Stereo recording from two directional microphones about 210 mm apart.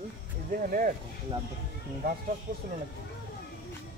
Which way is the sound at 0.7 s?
40° right (ahead or behind).